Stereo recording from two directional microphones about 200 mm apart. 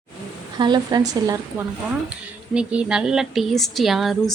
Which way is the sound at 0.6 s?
20° right (ahead or behind).